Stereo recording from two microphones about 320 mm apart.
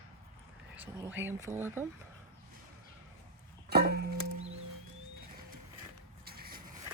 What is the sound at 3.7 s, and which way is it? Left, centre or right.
Music, right.